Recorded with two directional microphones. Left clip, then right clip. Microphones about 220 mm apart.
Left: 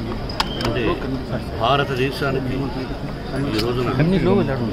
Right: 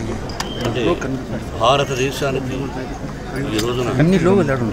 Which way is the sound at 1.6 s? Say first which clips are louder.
Right 3 dB; centre (ahead or behind).